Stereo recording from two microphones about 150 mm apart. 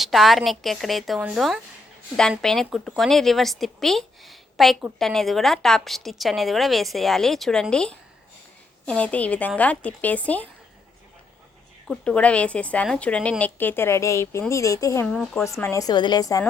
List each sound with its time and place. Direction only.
0.0 s a woman's voice: centre (ahead or behind)
11.9 s a woman's voice: 10° left (ahead or behind)
15.0 s a woman's voice: 5° left (ahead or behind)
15.4 s a woman's voice: 20° left (ahead or behind)